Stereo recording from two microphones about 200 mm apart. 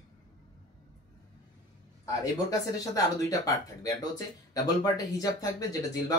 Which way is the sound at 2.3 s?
15° left (ahead or behind).